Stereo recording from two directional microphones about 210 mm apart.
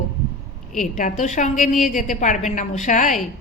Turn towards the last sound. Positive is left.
turn(degrees=35)  # may be behind; listen again after turning